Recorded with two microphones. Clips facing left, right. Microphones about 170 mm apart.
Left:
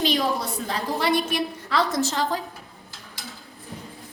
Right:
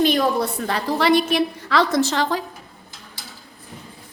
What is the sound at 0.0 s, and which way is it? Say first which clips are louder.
A woman's voice: right 5 dB; 55° right (ahead or behind).